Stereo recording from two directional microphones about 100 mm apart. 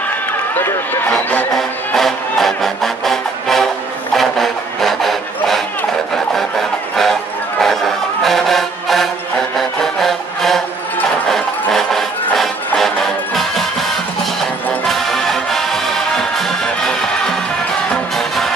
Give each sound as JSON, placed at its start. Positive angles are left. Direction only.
{"t": 1.5, "sound": "music", "side_deg": 5}
{"t": 7.6, "sound": "music", "side_deg": 0}
{"t": 9.6, "sound": "a sound", "side_deg": 5}
{"t": 11.2, "sound": "music", "side_deg": 5}
{"t": 14.9, "sound": "music", "side_deg": 5}
{"t": 18.1, "sound": "music", "side_deg": 0}